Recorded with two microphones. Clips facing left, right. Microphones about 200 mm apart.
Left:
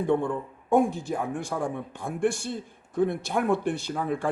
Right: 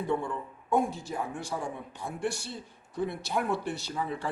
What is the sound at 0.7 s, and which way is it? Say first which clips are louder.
Speech: left 6 dB; 55° left (ahead or behind).